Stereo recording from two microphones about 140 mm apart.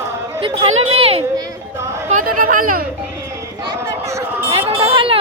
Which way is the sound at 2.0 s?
70° right (ahead or behind).